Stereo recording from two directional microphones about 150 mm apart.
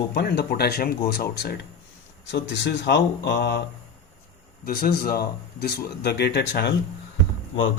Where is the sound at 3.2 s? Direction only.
90° left.